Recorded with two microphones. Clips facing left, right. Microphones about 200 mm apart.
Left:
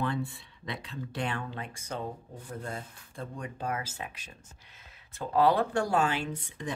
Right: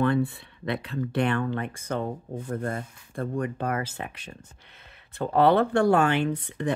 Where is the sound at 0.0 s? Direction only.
60° right (ahead or behind).